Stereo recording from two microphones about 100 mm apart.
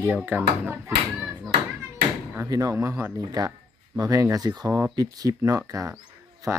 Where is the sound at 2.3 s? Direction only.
35° right (ahead or behind).